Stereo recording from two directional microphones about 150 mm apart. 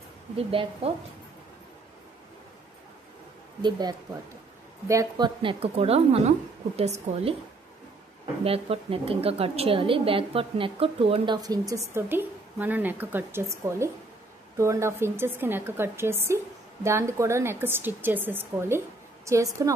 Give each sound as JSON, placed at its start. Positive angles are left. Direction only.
{"t": 0.4, "sound": "a woman's voice", "side_deg": -40}
{"t": 4.8, "sound": "a woman's voice", "side_deg": -25}
{"t": 8.5, "sound": "a woman's voice", "side_deg": -40}
{"t": 11.4, "sound": "a woman's voice", "side_deg": -25}